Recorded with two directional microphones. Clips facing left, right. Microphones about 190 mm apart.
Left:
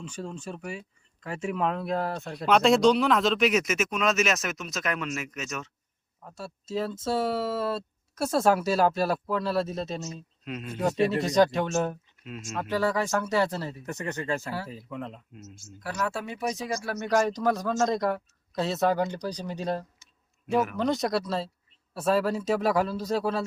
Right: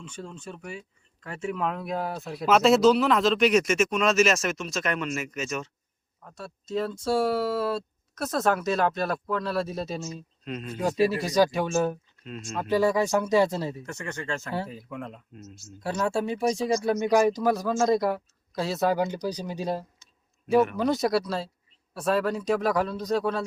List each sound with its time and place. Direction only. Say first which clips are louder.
0.3 s speech: left 2 dB; 5° left (ahead or behind)
1.6 s a man's voice: left 3 dB; centre (ahead or behind)
12.2 s speech: right 1 dB; 5° left (ahead or behind)
12.6 s a man's voice: right 4 dB; 15° right (ahead or behind)
13.8 s speech: left 2 dB; 15° left (ahead or behind)
14.7 s speech: even; centre (ahead or behind)
15.8 s speech: right 5 dB; 25° right (ahead or behind)
16.8 s a man's voice: right 3 dB; 15° right (ahead or behind)
20.5 s speech: right 3 dB; 5° left (ahead or behind)